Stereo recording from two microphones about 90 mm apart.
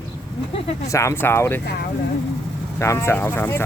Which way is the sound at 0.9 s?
30° left (ahead or behind).